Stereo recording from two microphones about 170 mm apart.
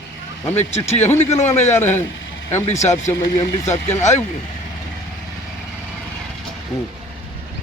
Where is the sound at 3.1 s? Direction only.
20° left (ahead or behind).